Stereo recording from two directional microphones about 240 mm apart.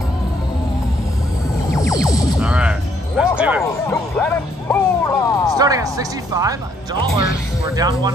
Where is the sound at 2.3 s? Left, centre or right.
Centre.